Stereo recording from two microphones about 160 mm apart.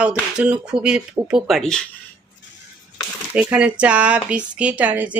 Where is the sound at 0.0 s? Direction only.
5° right (ahead or behind).